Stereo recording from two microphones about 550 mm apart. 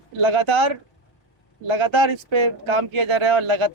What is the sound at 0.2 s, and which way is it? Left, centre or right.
Speech, right.